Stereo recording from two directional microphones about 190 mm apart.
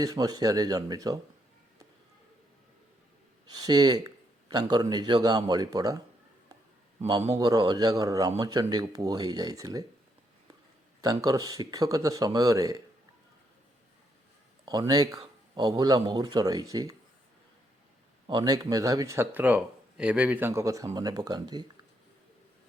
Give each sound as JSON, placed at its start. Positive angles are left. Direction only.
{"t": 0.0, "sound": "a man's voice", "side_deg": -20}
{"t": 3.7, "sound": "a man's voice", "side_deg": -20}
{"t": 7.3, "sound": "a man's voice", "side_deg": -20}
{"t": 11.0, "sound": "speech", "side_deg": -20}
{"t": 14.6, "sound": "speech", "side_deg": -20}
{"t": 15.2, "sound": "a sound", "side_deg": -20}
{"t": 16.0, "sound": "a man's voice", "side_deg": -20}
{"t": 18.3, "sound": "a man's voice", "side_deg": -20}